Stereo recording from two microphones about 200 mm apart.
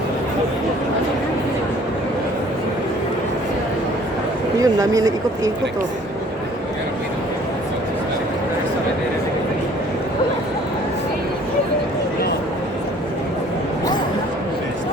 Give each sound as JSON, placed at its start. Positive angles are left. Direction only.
{"t": 4.6, "sound": "speech", "side_deg": -15}